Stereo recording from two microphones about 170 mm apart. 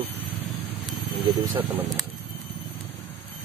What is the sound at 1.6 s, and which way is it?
Speech, 10° right (ahead or behind).